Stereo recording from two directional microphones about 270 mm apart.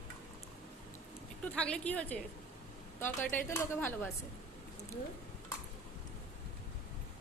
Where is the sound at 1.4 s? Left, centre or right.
Centre.